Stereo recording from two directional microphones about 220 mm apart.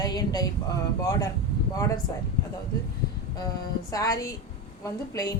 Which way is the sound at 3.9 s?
15° left (ahead or behind).